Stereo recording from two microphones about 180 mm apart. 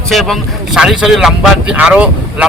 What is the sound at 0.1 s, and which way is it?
Speech, centre (ahead or behind).